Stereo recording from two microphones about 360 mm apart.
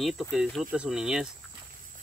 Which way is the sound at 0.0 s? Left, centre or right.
Centre.